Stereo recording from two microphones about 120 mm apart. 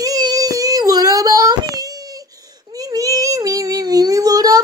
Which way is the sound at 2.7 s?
30° right (ahead or behind).